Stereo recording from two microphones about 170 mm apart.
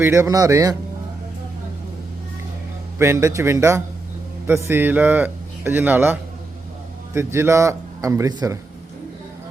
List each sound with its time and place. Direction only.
0.0 s speech: 15° right (ahead or behind)
3.0 s speech: 15° right (ahead or behind)